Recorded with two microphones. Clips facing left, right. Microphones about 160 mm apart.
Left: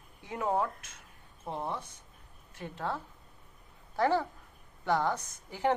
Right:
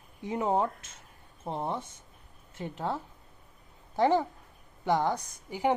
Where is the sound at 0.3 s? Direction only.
20° right (ahead or behind).